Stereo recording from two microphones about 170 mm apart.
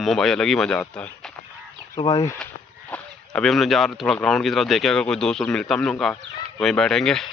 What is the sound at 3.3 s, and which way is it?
Speech, centre (ahead or behind).